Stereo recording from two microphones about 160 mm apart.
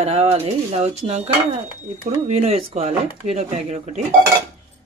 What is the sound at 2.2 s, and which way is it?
Speech, 40° right (ahead or behind).